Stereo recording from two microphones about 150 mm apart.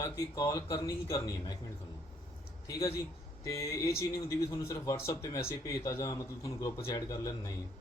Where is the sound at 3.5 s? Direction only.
20° left (ahead or behind).